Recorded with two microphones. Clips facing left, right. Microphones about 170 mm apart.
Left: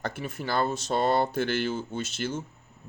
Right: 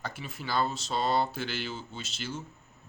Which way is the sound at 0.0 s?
50° left (ahead or behind).